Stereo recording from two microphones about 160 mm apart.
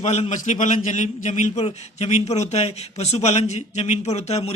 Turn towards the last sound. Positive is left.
turn(degrees=40)  # may be behind; listen again after turning